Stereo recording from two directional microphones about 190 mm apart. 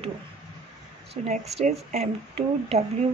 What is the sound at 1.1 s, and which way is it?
A woman's voice, 35° right (ahead or behind).